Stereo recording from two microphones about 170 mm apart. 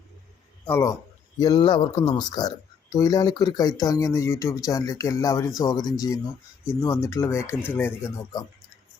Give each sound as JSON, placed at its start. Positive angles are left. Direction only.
{"t": 0.6, "sound": "speech", "side_deg": 15}